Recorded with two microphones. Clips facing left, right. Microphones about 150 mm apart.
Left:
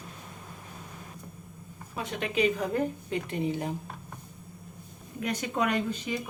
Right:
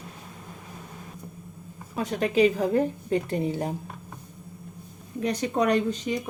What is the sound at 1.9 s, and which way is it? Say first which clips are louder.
A woman's voice: right 6 dB; 40° right (ahead or behind).